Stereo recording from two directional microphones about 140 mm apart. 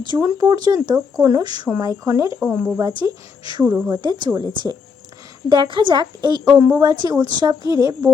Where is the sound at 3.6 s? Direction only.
10° right (ahead or behind).